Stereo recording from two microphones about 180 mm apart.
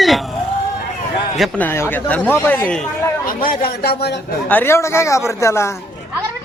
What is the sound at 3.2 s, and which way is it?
Speech, 50° left (ahead or behind).